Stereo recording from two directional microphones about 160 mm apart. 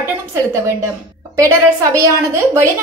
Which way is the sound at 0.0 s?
15° right (ahead or behind).